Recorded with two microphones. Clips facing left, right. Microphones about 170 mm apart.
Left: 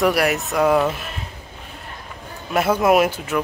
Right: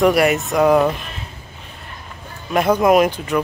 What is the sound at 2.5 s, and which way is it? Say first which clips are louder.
Speech: right 2 dB; 5° left (ahead or behind).